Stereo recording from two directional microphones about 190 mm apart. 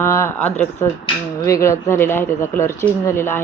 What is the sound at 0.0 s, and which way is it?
Speech, 15° left (ahead or behind).